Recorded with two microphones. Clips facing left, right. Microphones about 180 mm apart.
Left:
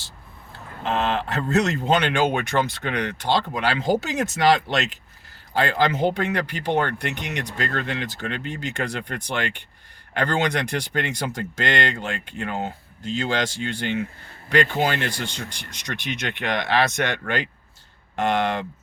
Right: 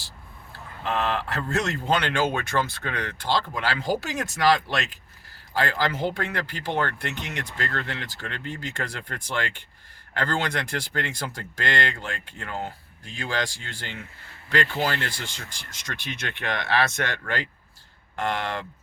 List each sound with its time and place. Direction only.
0.8 s speech: 20° left (ahead or behind)